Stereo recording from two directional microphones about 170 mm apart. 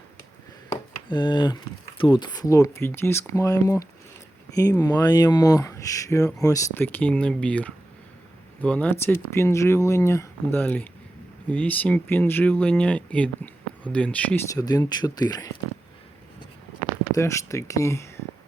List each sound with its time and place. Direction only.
0.7 s a sound: 25° left (ahead or behind)
2.0 s speech: 25° left (ahead or behind); by 14.4 s 10° left (ahead or behind)
14.5 s speech: 20° left (ahead or behind)
17.2 s speech: 20° left (ahead or behind)